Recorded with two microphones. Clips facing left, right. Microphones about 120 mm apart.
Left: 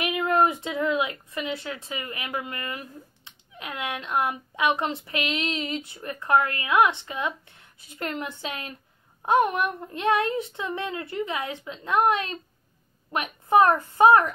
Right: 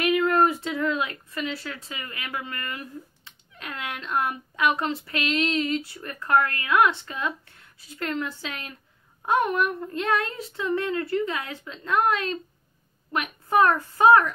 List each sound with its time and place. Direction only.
0.0 s speech: 25° left (ahead or behind)